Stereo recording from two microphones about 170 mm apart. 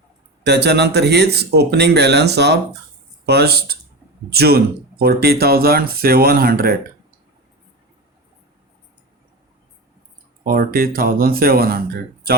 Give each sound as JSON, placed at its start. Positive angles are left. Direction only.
{"t": 0.4, "sound": "speech", "side_deg": -75}
{"t": 10.4, "sound": "speech", "side_deg": -60}